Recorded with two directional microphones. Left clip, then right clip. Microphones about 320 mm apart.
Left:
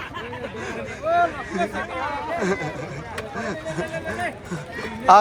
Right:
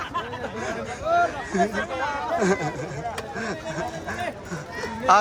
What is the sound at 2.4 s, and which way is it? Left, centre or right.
Speech, centre.